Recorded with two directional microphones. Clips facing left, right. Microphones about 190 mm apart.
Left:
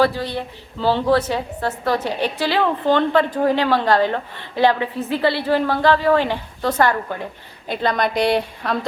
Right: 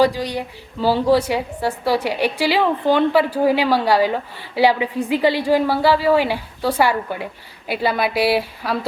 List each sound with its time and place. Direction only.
0.0 s a woman's voice: 15° right (ahead or behind)